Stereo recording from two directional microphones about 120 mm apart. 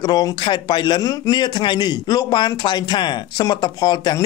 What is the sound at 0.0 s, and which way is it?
Speech, 35° left (ahead or behind).